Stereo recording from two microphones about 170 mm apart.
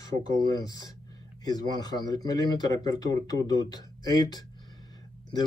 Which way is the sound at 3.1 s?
20° left (ahead or behind).